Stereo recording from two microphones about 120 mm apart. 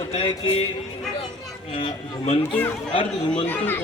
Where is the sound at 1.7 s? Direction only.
45° left (ahead or behind).